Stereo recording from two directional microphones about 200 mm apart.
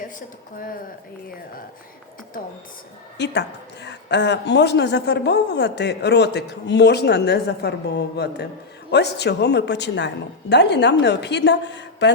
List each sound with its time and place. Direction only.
3.2 s a woman's voice: 60° left (ahead or behind)